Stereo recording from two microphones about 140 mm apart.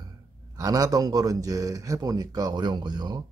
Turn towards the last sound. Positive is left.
turn(degrees=-30)  # may be behind; listen again after turning